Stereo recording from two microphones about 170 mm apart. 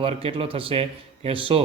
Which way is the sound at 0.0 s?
35° right (ahead or behind).